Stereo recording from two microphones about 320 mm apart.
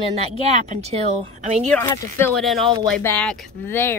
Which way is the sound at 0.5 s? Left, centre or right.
Centre.